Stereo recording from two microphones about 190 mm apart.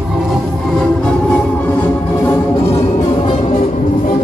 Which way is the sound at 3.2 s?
30° left (ahead or behind).